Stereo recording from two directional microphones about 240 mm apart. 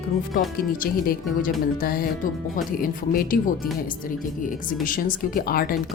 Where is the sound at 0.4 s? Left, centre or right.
Left.